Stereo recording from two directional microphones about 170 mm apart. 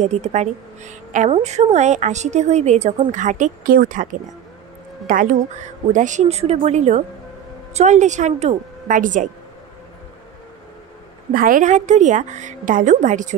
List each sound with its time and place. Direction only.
0.0 s a woman's voice: 45° right (ahead or behind)
11.3 s a woman's voice: 55° right (ahead or behind)